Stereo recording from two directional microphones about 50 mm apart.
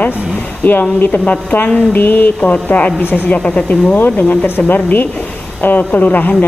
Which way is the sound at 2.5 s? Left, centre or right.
Left.